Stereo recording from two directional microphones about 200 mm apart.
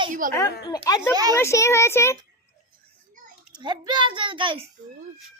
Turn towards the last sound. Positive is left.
turn(degrees=-25)  # may be behind; listen again after turning